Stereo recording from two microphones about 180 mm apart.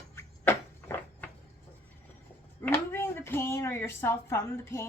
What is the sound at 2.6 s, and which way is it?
A woman's voice, 15° left (ahead or behind).